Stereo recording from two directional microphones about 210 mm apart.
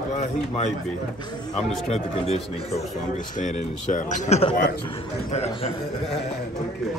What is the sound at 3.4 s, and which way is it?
A man's voice, 40° left (ahead or behind).